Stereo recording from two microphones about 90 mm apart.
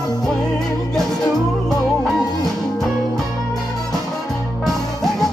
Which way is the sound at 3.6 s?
45° left (ahead or behind).